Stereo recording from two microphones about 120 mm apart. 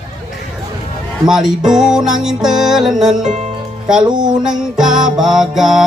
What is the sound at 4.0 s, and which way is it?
Music, 40° right (ahead or behind).